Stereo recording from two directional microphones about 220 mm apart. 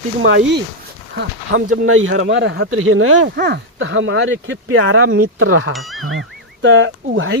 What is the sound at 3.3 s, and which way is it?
Speech, 50° right (ahead or behind).